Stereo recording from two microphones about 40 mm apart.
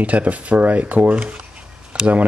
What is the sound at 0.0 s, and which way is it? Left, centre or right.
Speech, right.